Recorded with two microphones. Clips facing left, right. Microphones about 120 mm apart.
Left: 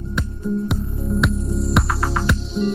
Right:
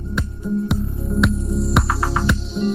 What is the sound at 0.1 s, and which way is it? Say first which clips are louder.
Music: even; centre (ahead or behind).